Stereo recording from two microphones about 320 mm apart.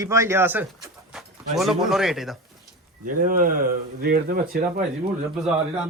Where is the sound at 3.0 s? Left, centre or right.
Right.